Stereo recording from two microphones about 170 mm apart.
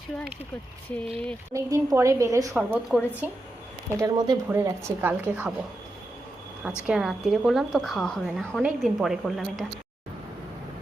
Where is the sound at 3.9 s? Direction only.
25° right (ahead or behind).